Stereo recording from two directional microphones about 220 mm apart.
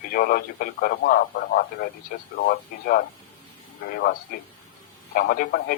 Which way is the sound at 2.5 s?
45° left (ahead or behind).